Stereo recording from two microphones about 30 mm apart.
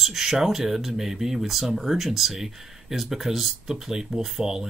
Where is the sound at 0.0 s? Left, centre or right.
Centre.